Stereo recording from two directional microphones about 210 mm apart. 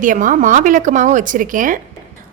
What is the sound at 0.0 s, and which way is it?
A woman's voice, 40° right (ahead or behind).